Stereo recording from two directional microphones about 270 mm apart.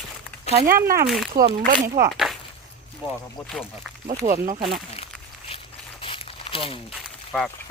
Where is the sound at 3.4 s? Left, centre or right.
Centre.